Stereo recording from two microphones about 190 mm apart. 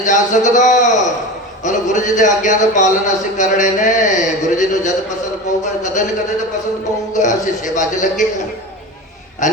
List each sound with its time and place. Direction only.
0.0 s speech: 40° left (ahead or behind)
7.1 s speech: 40° left (ahead or behind)
9.4 s a sound: 40° left (ahead or behind)